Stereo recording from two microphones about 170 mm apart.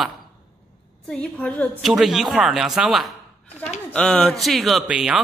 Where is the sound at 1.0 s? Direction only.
5° left (ahead or behind).